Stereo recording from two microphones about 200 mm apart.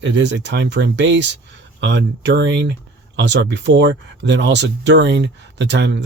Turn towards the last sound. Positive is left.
turn(degrees=-60)  # may be behind; listen again after turning